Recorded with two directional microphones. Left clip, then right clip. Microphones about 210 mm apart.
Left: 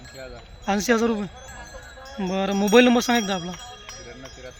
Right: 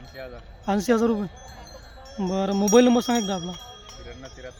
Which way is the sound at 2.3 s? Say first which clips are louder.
Left 1 dB; 15° right (ahead or behind).